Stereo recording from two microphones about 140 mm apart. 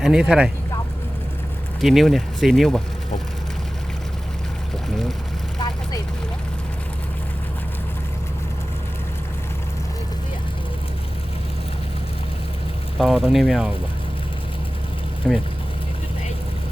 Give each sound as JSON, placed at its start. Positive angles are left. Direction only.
{"t": 0.0, "sound": "speech", "side_deg": -5}
{"t": 1.8, "sound": "speech", "side_deg": 0}
{"t": 5.5, "sound": "vehicle", "side_deg": 30}
{"t": 13.0, "sound": "speech", "side_deg": 0}
{"t": 15.3, "sound": "speech", "side_deg": -5}